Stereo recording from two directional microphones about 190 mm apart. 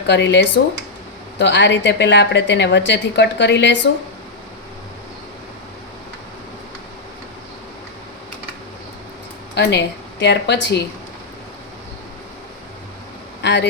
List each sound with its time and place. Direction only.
0.1 s a woman's voice: 65° left (ahead or behind)
9.6 s a woman's voice: 65° left (ahead or behind)
13.4 s speech: 65° left (ahead or behind)